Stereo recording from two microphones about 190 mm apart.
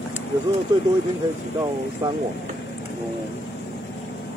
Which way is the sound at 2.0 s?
20° right (ahead or behind).